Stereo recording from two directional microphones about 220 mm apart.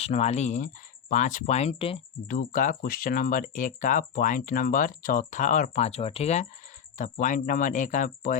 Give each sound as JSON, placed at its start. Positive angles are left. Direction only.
{"t": 0.0, "sound": "speech", "side_deg": 30}
{"t": 2.2, "sound": "speech", "side_deg": 35}